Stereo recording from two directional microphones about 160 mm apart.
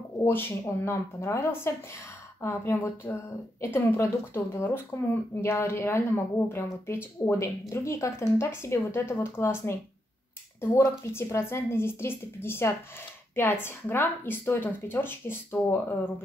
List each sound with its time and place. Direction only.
0.2 s speech: 15° left (ahead or behind)